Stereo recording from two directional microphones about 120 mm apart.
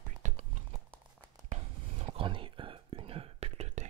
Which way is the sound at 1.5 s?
55° right (ahead or behind).